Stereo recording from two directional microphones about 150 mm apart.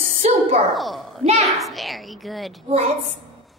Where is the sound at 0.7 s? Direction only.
Centre (ahead or behind).